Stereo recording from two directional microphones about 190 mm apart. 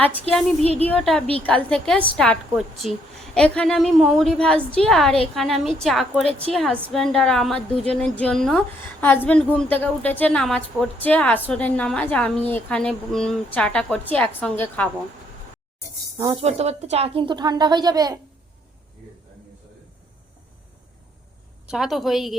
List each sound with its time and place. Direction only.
0.9 s a woman's voice: 5° left (ahead or behind)
16.1 s speech: 25° right (ahead or behind)
21.7 s a woman's voice: centre (ahead or behind)